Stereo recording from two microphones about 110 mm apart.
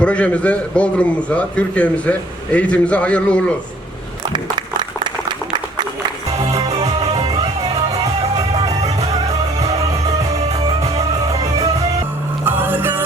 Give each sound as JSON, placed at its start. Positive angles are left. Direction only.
{"t": 0.0, "sound": "a man's voice", "side_deg": 10}
{"t": 4.3, "sound": "a sound", "side_deg": -40}
{"t": 7.0, "sound": "music", "side_deg": -65}
{"t": 12.5, "sound": "music", "side_deg": -20}